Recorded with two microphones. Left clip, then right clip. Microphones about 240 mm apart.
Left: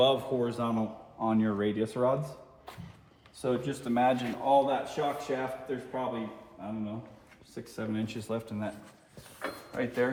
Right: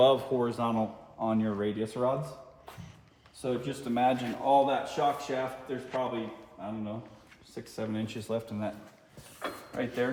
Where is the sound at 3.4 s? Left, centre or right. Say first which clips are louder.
Left 2 dB; centre.